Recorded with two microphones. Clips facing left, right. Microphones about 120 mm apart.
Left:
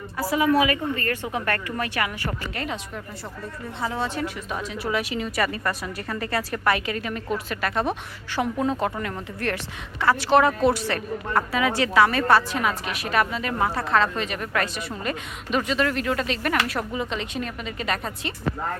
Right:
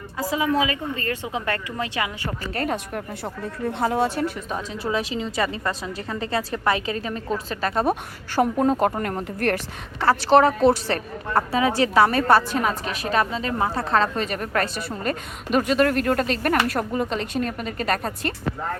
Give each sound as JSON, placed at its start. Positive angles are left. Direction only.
{"t": 0.2, "sound": "a woman's voice", "side_deg": -20}
{"t": 2.6, "sound": "a woman's voice", "side_deg": -50}
{"t": 4.0, "sound": "a woman's voice", "side_deg": -40}
{"t": 4.5, "sound": "a woman's voice", "side_deg": -30}
{"t": 10.0, "sound": "a woman's voice", "side_deg": -35}